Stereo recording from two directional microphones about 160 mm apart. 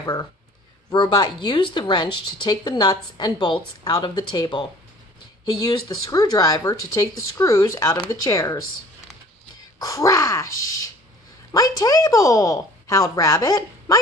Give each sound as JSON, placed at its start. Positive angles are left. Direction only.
{"t": 0.0, "sound": "speech", "side_deg": 25}
{"t": 9.8, "sound": "speech", "side_deg": 20}